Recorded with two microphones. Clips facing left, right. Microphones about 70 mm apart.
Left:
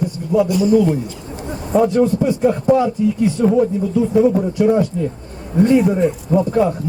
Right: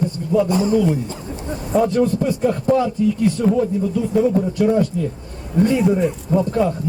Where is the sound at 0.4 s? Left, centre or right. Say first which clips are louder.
Left 3 dB; right.